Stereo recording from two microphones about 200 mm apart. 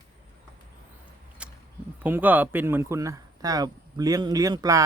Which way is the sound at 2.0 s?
10° right (ahead or behind).